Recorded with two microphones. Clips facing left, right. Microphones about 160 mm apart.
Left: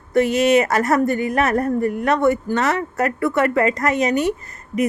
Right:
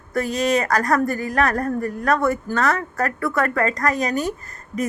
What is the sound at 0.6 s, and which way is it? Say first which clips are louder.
A woman's voice: left 2 dB; 25° left (ahead or behind).